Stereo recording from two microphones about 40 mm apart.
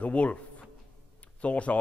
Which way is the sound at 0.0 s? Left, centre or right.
Left.